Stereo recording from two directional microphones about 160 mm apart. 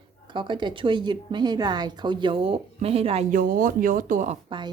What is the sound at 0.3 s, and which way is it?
A woman's voice, 30° right (ahead or behind).